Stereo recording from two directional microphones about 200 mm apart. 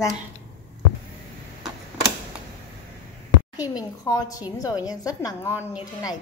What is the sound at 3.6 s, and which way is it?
A woman's voice, 20° left (ahead or behind).